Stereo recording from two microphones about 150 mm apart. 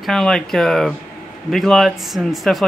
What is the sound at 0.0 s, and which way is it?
Speech, 5° left (ahead or behind).